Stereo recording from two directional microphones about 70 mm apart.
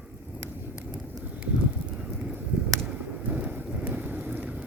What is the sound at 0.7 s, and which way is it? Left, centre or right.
Clip-clop, centre.